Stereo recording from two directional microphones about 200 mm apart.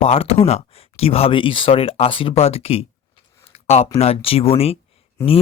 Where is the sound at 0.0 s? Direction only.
30° left (ahead or behind).